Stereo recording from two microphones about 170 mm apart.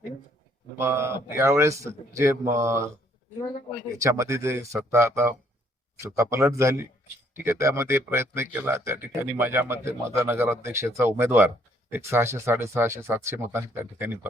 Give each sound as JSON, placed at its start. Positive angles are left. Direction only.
{"t": 0.8, "sound": "speech", "side_deg": -15}
{"t": 3.9, "sound": "speech", "side_deg": -20}